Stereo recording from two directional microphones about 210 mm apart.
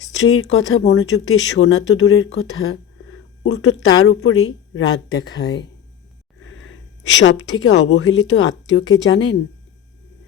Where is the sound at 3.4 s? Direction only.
60° left (ahead or behind).